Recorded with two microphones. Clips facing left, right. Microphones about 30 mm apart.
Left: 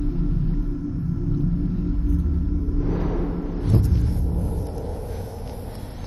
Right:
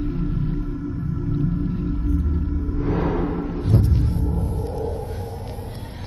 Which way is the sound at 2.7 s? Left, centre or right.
Right.